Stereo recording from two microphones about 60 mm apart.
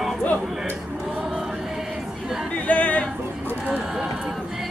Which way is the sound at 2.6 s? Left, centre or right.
Left.